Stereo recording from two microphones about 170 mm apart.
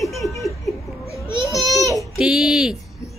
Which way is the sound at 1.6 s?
Centre (ahead or behind).